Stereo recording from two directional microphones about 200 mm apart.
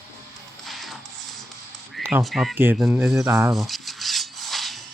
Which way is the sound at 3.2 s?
15° right (ahead or behind).